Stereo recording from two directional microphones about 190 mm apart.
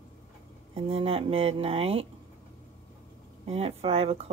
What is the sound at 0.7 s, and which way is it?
Speech, 30° right (ahead or behind).